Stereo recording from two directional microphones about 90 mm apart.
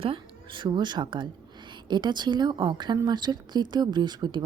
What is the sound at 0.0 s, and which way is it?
Speech, 70° right (ahead or behind).